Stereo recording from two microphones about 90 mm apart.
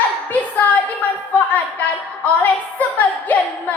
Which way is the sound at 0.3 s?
20° left (ahead or behind).